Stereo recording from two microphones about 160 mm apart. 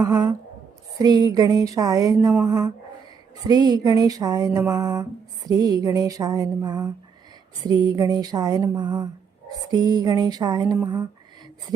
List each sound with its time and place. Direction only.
0.0 s speech: 25° right (ahead or behind)